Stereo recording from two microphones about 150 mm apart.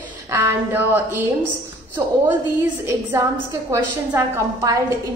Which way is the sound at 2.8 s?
20° right (ahead or behind).